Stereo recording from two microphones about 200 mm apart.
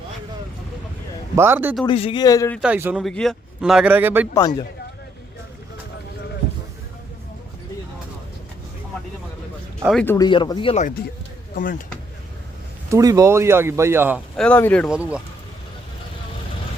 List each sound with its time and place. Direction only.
1.4 s speech: 10° right (ahead or behind)
1.9 s speech: 25° left (ahead or behind)
2.6 s a man's voice: 10° right (ahead or behind)
4.4 s speech: 20° left (ahead or behind)
9.8 s a man's voice: 5° left (ahead or behind)
10.2 s speech: 20° left (ahead or behind)
11.5 s speech: 40° left (ahead or behind)
12.9 s speech: 15° right (ahead or behind)
14.3 s a man's voice: 5° left (ahead or behind)